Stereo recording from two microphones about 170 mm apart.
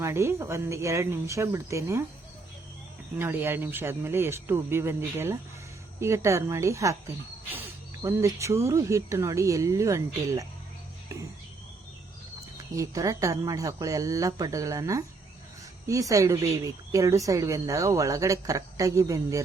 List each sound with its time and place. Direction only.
0.0 s speech: 15° right (ahead or behind)
3.2 s speech: 15° right (ahead or behind)
8.0 s speech: 15° right (ahead or behind)
12.7 s a woman's voice: 20° right (ahead or behind)